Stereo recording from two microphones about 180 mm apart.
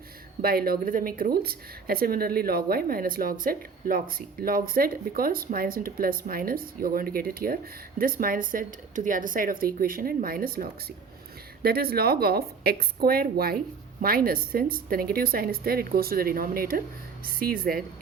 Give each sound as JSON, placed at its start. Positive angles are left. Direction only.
{"t": 0.4, "sound": "a woman's voice", "side_deg": -55}